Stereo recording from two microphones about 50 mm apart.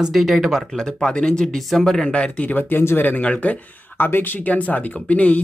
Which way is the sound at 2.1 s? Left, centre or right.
Left.